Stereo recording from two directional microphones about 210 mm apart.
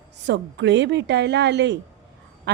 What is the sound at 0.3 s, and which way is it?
A woman's voice, 55° right (ahead or behind).